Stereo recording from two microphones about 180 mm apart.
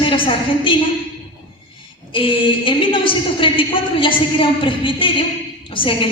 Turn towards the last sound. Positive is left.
turn(degrees=30)  # may be behind; listen again after turning